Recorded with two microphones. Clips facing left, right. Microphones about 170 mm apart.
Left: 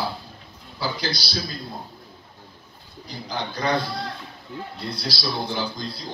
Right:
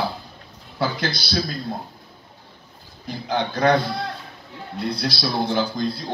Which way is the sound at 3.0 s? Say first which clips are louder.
Right 6 dB; 60° right (ahead or behind).